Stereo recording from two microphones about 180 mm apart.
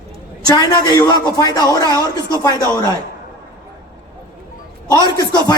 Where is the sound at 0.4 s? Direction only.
20° left (ahead or behind).